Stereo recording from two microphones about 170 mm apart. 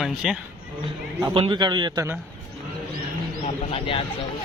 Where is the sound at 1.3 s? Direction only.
30° right (ahead or behind).